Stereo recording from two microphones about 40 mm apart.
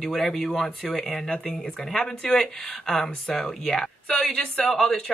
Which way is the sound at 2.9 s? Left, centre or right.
Centre.